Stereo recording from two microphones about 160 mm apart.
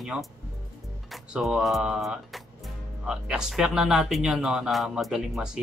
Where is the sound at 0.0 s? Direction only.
Centre (ahead or behind).